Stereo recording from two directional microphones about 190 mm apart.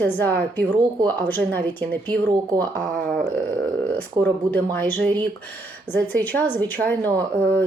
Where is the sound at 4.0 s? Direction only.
10° left (ahead or behind).